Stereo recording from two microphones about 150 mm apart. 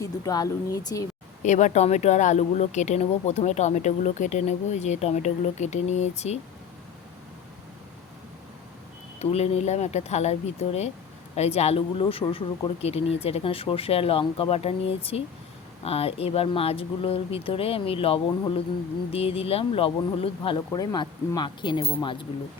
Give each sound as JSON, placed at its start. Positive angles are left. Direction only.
{"t": 0.0, "sound": "speech", "side_deg": 25}
{"t": 1.4, "sound": "speech", "side_deg": 55}
{"t": 9.1, "sound": "speech", "side_deg": 45}